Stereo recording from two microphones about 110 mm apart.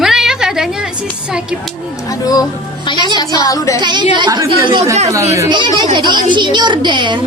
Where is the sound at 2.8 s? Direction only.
45° left (ahead or behind).